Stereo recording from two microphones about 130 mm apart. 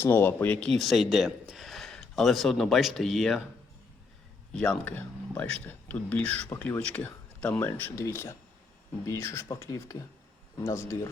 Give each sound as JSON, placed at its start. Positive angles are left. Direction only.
{"t": 0.0, "sound": "speech", "side_deg": 15}
{"t": 4.5, "sound": "speech", "side_deg": 5}